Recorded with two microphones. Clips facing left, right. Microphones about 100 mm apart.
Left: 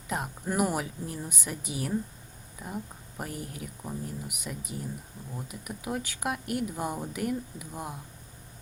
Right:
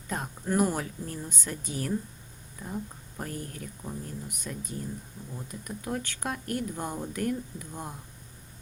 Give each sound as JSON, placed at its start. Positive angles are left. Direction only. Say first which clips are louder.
{"t": 0.1, "sound": "speech", "louder": "right 1 dB", "side_deg": 10}